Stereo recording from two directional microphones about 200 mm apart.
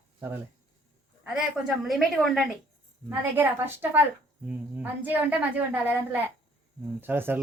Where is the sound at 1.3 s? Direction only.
Centre (ahead or behind).